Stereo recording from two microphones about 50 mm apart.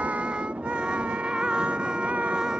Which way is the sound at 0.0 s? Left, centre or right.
Right.